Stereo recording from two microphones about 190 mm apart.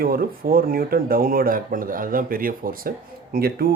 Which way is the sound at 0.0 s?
50° right (ahead or behind).